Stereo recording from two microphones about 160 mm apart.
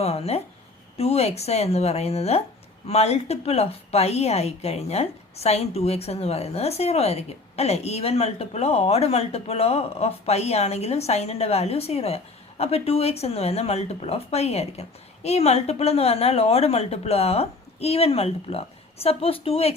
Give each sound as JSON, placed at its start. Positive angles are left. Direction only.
{"t": 0.0, "sound": "a woman's voice", "side_deg": 40}